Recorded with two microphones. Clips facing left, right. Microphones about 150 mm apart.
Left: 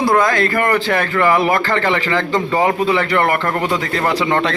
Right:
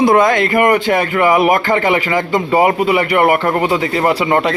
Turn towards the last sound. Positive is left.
turn(degrees=-10)  # may be behind; listen again after turning